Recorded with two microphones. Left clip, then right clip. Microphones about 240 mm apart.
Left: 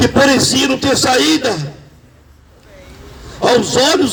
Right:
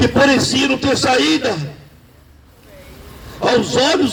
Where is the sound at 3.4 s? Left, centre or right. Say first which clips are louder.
Left 3 dB; left.